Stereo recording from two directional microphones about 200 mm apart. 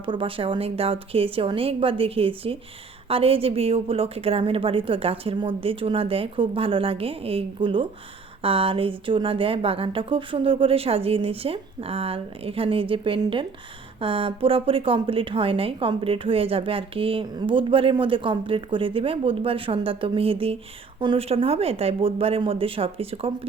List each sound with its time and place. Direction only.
0.0 s speech: 25° right (ahead or behind)